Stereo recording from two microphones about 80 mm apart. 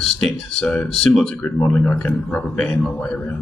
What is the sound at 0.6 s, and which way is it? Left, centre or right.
Speech, centre.